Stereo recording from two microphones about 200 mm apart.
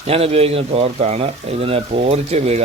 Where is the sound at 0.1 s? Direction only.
30° right (ahead or behind).